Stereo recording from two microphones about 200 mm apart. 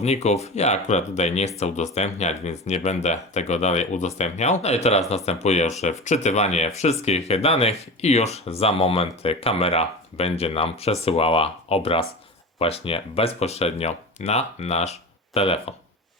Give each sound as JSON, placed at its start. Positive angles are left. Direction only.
{"t": 0.0, "sound": "speech", "side_deg": 35}